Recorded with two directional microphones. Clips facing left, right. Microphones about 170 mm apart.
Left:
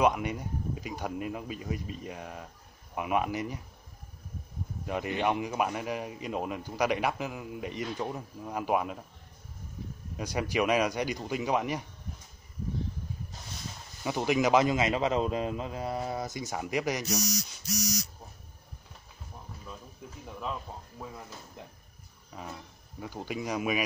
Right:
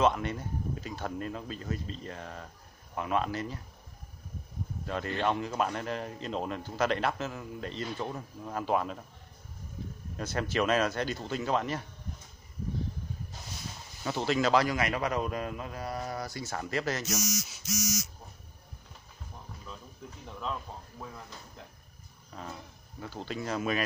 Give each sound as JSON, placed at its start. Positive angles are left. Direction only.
{"t": 0.0, "sound": "a man's voice", "side_deg": 15}
{"t": 4.8, "sound": "a man's voice", "side_deg": 15}
{"t": 10.1, "sound": "a man's voice", "side_deg": 10}
{"t": 14.0, "sound": "a man's voice", "side_deg": 15}
{"t": 17.2, "sound": "speech", "side_deg": 35}
{"t": 20.2, "sound": "a man's voice", "side_deg": 10}
{"t": 22.3, "sound": "a man's voice", "side_deg": 10}